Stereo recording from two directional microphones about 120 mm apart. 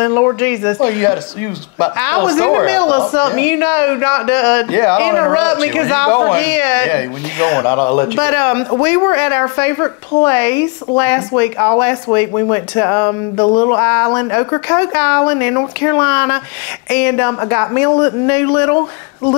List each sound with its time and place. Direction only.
0.0 s a woman's voice: 25° left (ahead or behind)